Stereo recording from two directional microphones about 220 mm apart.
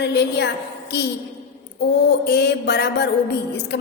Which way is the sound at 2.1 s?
50° left (ahead or behind).